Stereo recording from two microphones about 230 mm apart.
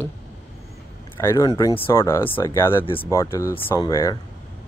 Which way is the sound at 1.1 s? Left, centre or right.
Centre.